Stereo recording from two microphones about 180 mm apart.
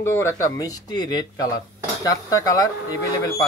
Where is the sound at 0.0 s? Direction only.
15° left (ahead or behind).